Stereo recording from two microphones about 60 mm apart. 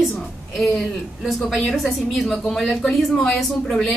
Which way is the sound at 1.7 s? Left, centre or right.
Centre.